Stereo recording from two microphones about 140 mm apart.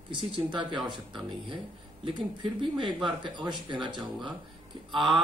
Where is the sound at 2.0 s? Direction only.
35° right (ahead or behind).